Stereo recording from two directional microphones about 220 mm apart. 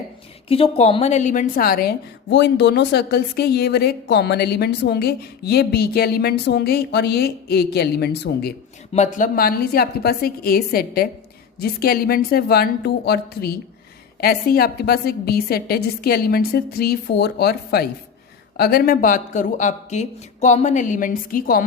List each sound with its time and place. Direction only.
0.4 s a woman's voice: 25° left (ahead or behind); by 8.5 s 45° left (ahead or behind)
8.9 s a woman's voice: 35° left (ahead or behind)